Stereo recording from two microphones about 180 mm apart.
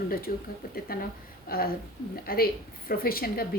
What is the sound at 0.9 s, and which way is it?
A woman's voice, 60° left (ahead or behind).